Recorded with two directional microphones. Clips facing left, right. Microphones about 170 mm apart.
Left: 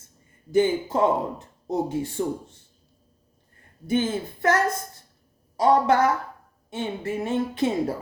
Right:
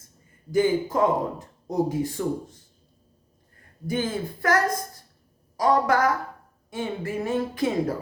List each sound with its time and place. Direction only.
0.5 s speech: 25° left (ahead or behind)
3.8 s speech: 25° left (ahead or behind)